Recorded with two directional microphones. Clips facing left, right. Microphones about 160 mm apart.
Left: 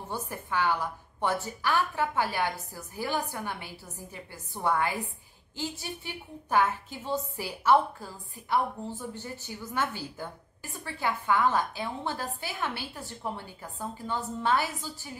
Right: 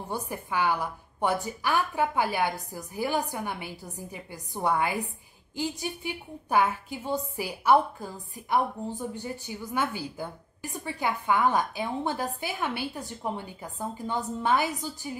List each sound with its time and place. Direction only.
0.1 s a woman's voice: 10° right (ahead or behind)